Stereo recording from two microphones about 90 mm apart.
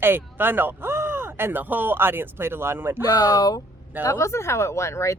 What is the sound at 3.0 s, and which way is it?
Speech, 45° left (ahead or behind).